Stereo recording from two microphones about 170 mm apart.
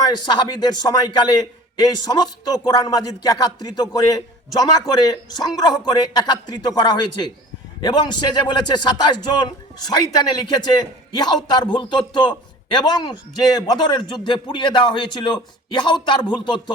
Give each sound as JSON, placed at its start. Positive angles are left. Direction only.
{"t": 0.0, "sound": "a man's voice", "side_deg": 25}